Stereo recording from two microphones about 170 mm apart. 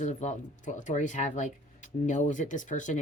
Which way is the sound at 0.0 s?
45° left (ahead or behind).